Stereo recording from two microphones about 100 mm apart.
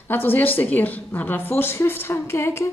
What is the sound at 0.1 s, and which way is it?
A woman's voice, 20° left (ahead or behind).